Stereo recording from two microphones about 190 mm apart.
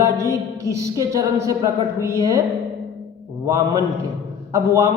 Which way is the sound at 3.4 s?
15° right (ahead or behind).